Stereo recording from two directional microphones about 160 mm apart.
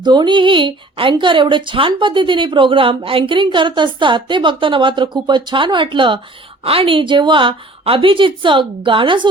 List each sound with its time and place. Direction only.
0.0 s speech: 25° right (ahead or behind)